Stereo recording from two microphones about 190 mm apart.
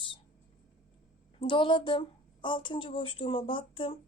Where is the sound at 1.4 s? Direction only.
25° left (ahead or behind).